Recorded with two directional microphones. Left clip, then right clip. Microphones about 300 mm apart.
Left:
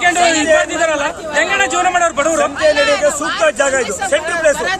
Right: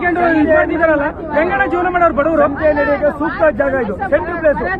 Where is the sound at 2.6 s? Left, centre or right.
Left.